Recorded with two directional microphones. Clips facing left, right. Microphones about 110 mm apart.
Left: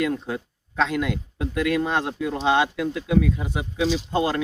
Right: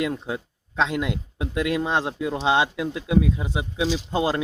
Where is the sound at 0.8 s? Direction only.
20° right (ahead or behind).